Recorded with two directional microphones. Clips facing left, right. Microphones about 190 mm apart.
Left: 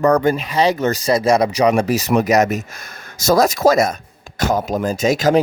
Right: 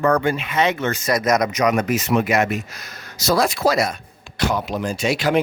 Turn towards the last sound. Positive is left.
turn(degrees=40)  # may be behind; listen again after turning